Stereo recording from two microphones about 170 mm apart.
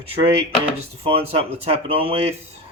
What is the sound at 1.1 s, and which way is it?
Speech, 35° right (ahead or behind).